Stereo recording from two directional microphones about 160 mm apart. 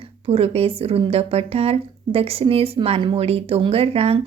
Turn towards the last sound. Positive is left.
turn(degrees=-40)  # may be behind; listen again after turning